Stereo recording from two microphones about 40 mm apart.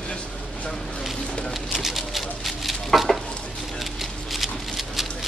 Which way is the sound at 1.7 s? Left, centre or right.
Centre.